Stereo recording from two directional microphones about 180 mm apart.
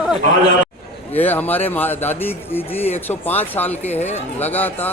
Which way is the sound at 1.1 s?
10° left (ahead or behind).